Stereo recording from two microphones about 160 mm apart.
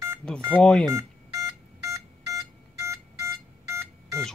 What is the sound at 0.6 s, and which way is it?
Speech, 5° left (ahead or behind).